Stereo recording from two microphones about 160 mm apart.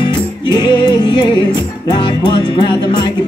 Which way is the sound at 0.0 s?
25° left (ahead or behind).